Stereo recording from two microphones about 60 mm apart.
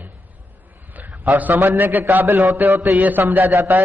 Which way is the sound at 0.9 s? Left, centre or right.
Right.